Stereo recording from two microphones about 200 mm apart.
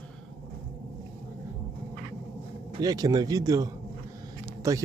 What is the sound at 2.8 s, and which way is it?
Speech, 20° right (ahead or behind).